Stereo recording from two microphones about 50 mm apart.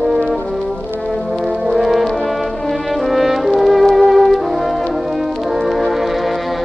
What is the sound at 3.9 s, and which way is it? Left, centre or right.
Music, centre.